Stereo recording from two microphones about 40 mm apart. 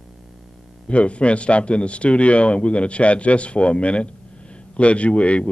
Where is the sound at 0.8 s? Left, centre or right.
Left.